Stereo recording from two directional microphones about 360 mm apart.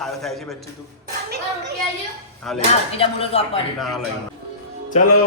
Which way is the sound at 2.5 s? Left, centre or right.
Centre.